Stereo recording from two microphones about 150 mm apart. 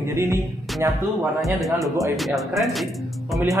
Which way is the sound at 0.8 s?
15° right (ahead or behind).